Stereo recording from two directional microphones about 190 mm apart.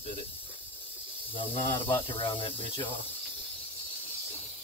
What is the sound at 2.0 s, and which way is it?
Speech, 30° left (ahead or behind).